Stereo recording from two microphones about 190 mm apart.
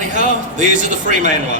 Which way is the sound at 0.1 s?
40° right (ahead or behind).